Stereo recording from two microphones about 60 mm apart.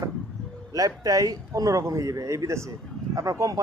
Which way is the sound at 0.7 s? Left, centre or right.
Right.